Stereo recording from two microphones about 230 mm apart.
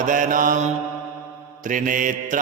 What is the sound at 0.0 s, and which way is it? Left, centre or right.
Mantra, right.